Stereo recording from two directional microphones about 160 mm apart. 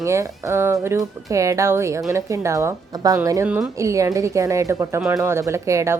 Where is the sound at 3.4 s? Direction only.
10° right (ahead or behind).